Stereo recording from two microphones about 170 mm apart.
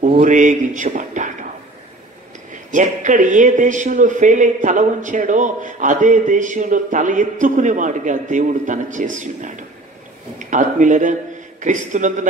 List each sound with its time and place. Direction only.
0.2 s speech: 50° right (ahead or behind)
2.5 s speech: 45° right (ahead or behind)